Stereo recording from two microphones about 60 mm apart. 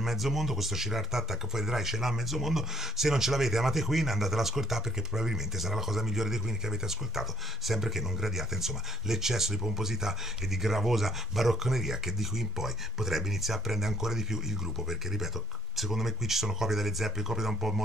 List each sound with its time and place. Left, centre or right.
0.0 s speech: centre